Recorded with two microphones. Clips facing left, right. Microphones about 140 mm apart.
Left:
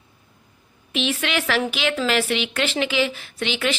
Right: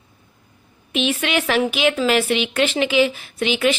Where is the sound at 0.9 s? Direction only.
15° right (ahead or behind).